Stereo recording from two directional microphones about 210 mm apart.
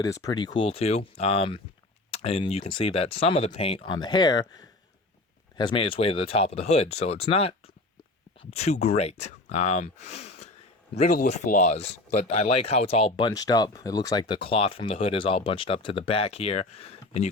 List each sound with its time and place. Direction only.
0.0 s speech: 15° left (ahead or behind)